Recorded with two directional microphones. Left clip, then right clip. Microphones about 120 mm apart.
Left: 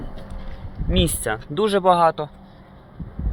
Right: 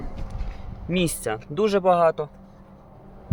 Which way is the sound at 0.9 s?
Centre (ahead or behind).